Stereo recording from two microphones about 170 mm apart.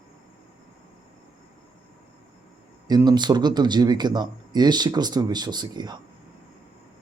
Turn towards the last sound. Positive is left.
turn(degrees=-25)  # may be behind; listen again after turning